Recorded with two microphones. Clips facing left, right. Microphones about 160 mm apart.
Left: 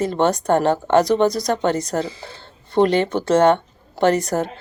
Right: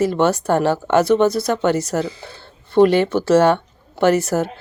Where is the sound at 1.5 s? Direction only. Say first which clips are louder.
Right 2 dB; 30° left (ahead or behind).